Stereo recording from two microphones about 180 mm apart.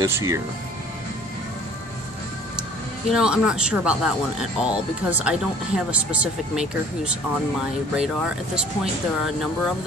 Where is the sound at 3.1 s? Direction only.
5° right (ahead or behind).